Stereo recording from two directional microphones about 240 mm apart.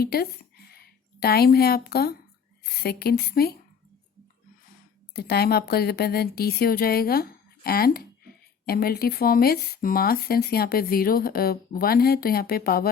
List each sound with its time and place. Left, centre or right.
0.0 s speech: left
5.1 s speech: left